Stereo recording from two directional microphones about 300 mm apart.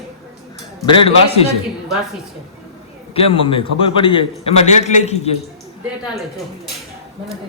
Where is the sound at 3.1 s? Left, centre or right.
Centre.